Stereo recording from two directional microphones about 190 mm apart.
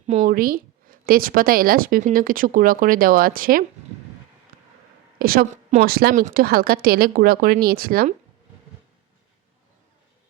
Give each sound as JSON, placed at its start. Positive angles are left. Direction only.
{"t": 0.1, "sound": "speech", "side_deg": -45}
{"t": 5.2, "sound": "speech", "side_deg": -50}